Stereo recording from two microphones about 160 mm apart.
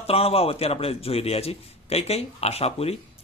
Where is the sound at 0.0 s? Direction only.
40° left (ahead or behind).